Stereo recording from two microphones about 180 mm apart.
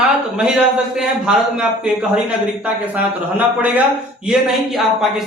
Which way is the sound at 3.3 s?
10° right (ahead or behind).